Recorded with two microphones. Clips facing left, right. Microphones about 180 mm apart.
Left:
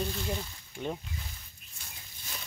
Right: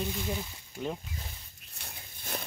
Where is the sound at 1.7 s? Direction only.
60° right (ahead or behind).